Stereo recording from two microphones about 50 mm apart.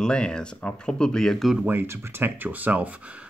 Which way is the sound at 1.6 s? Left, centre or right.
Right.